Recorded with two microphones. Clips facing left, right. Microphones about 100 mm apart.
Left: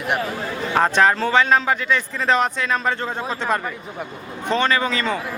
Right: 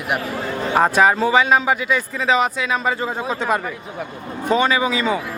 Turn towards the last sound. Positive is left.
turn(degrees=-10)  # may be behind; listen again after turning